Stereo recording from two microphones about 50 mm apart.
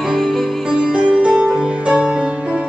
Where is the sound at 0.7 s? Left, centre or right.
Centre.